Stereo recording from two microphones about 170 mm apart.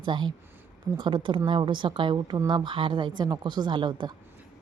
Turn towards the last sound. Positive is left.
turn(degrees=-30)  # may be behind; listen again after turning